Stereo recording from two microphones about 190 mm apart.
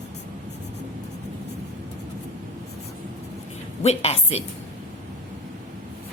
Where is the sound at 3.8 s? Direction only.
35° left (ahead or behind).